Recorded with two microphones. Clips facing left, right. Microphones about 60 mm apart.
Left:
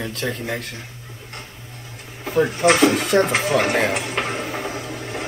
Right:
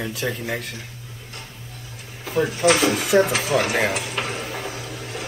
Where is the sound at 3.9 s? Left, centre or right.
Left.